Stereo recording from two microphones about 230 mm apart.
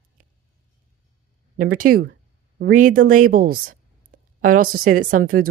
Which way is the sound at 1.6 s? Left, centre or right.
Right.